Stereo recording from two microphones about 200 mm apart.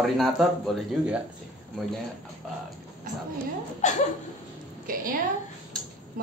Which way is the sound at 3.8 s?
40° left (ahead or behind).